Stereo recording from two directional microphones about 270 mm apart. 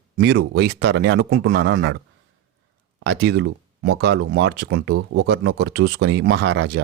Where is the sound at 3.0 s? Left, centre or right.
Right.